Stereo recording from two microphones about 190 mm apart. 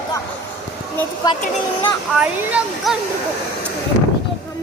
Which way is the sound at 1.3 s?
20° left (ahead or behind).